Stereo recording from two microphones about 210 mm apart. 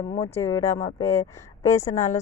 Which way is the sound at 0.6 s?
35° left (ahead or behind).